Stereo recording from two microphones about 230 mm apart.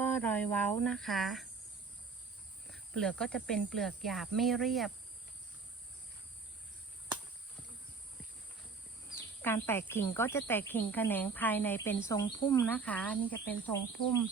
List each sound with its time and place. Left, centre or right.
0.0 s speech: centre
2.7 s speech: centre
9.4 s speech: centre